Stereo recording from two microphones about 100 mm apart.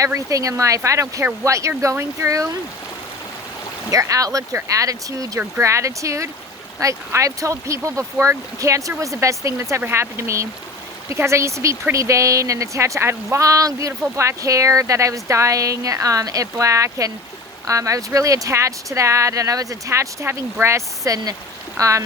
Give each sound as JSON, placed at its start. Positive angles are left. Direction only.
{"t": 0.0, "sound": "speech", "side_deg": -30}
{"t": 3.9, "sound": "speech", "side_deg": -35}